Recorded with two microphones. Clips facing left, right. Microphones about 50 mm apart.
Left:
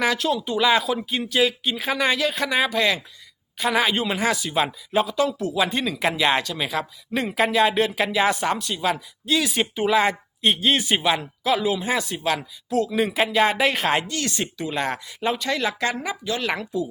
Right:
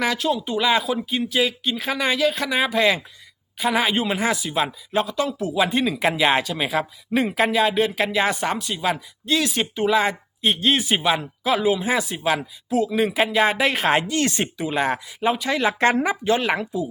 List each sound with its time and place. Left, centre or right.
0.0 s speech: centre
14.2 s speech: right
14.6 s speech: centre
15.8 s speech: right
16.4 s speech: centre